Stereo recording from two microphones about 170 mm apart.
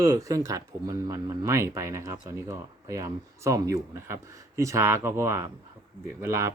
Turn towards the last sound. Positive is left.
turn(degrees=-15)  # may be behind; listen again after turning